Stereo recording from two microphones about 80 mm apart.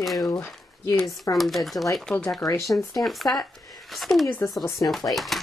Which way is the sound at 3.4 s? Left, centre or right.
Centre.